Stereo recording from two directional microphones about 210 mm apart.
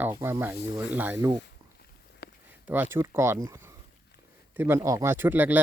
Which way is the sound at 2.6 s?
10° right (ahead or behind).